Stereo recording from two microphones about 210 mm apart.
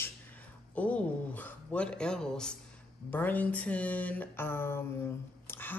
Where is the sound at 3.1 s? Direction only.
10° left (ahead or behind).